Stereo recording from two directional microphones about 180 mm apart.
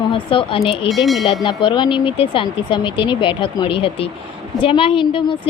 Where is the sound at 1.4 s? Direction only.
25° left (ahead or behind).